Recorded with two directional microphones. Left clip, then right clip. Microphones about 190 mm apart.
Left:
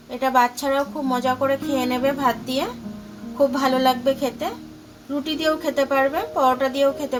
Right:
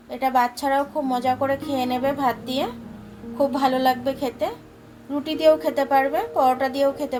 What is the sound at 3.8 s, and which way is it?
A woman's voice, 25° left (ahead or behind).